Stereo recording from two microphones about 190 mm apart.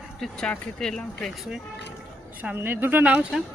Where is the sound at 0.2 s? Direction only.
5° left (ahead or behind).